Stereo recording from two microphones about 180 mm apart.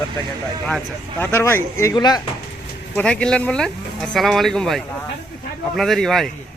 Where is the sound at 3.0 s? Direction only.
5° left (ahead or behind).